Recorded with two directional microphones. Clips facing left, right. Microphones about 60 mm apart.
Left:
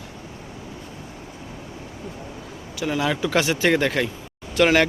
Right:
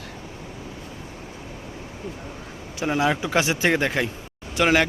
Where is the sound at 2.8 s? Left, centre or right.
Right.